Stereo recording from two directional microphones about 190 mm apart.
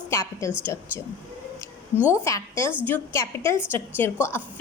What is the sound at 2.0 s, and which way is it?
A woman's voice, 15° left (ahead or behind).